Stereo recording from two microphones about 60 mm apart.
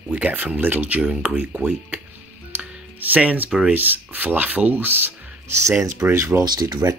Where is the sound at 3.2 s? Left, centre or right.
Centre.